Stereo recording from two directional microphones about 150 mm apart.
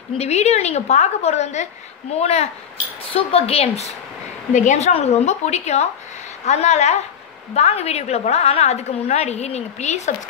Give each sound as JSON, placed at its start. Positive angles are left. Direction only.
{"t": 0.2, "sound": "a woman's voice", "side_deg": 45}